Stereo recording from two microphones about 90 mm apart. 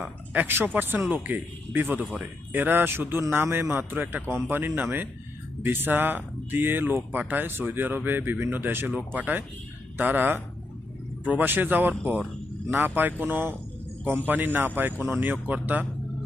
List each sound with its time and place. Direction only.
0.3 s speech: 20° right (ahead or behind)